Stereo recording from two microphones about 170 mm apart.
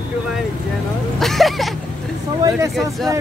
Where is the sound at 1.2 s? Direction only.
Centre (ahead or behind).